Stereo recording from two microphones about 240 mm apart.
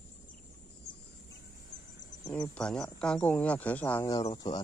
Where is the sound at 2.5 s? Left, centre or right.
Centre.